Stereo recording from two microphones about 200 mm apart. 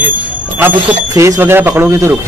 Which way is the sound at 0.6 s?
10° right (ahead or behind).